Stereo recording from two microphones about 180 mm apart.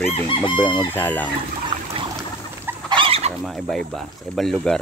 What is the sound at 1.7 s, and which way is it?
Trickle, 25° right (ahead or behind).